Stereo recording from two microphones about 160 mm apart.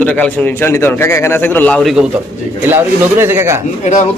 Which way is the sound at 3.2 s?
15° right (ahead or behind).